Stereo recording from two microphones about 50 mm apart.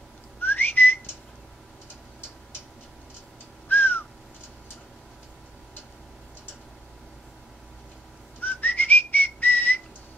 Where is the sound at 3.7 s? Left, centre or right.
Left.